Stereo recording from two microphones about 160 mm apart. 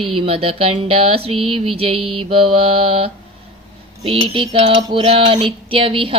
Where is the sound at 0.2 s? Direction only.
35° right (ahead or behind).